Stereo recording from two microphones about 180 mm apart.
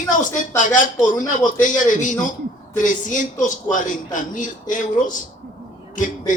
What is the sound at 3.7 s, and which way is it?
Speech, 45° left (ahead or behind).